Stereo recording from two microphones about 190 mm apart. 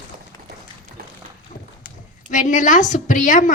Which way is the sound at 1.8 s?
40° left (ahead or behind).